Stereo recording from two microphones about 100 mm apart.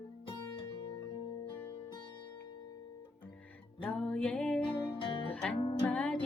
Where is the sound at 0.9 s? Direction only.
55° left (ahead or behind).